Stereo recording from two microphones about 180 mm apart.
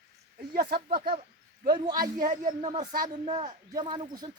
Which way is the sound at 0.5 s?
60° right (ahead or behind).